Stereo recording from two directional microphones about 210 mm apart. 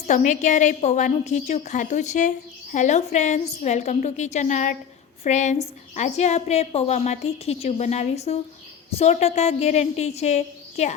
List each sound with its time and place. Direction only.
0.1 s a woman's voice: 35° left (ahead or behind)